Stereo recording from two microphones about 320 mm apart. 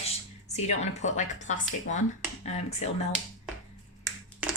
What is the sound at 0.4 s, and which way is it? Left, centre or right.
Speech, left.